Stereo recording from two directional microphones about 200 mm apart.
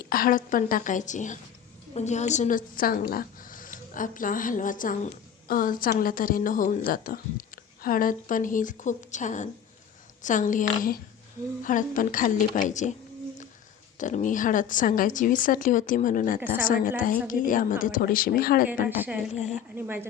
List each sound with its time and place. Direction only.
0.0 s a woman's voice: 45° left (ahead or behind)
14.0 s a woman's voice: 40° left (ahead or behind)
18.9 s a woman's voice: 10° right (ahead or behind)